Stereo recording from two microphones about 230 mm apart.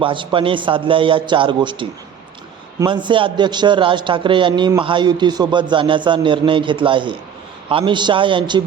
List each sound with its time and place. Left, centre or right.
0.0 s a man's voice: right